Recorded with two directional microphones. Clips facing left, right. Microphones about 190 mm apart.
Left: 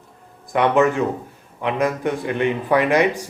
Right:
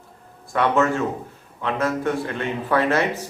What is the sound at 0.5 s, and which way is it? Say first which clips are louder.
Speech: left 3 dB; 15° left (ahead or behind).